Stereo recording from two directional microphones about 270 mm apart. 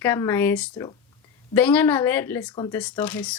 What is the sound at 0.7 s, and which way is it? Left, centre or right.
Speech, centre.